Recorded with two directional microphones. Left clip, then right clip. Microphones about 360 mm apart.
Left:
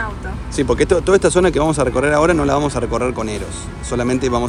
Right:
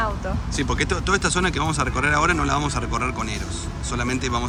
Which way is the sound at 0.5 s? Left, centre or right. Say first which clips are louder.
Left 10 dB; centre.